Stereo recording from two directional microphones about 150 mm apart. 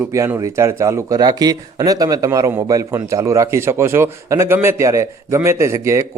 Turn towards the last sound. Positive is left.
turn(degrees=-20)  # may be behind; listen again after turning